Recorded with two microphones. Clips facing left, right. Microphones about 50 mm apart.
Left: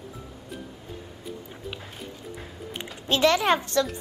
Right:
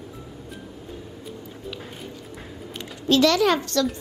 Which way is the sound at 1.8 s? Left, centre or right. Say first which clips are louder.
Right 2 dB; centre.